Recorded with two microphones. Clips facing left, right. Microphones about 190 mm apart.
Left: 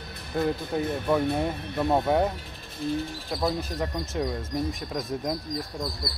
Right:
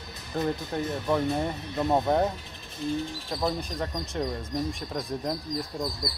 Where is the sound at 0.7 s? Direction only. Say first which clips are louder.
Left 2 dB; 5° left (ahead or behind).